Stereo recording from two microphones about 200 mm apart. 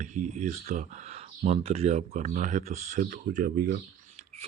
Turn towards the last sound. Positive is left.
turn(degrees=-50)  # may be behind; listen again after turning